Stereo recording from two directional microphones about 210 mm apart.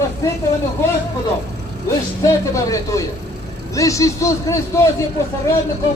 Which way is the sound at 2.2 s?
15° left (ahead or behind).